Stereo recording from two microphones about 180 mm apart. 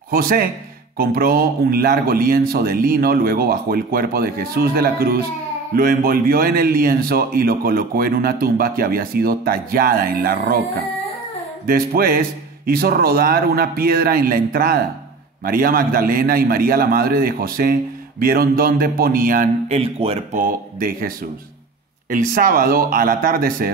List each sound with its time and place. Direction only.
0.1 s speech: 55° right (ahead or behind)
11.6 s speech: 55° right (ahead or behind)
19.7 s speech: 35° right (ahead or behind)
20.4 s speech: 50° right (ahead or behind)
22.1 s speech: 50° right (ahead or behind)